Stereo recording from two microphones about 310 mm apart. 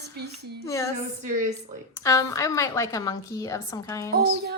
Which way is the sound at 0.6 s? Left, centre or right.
Centre.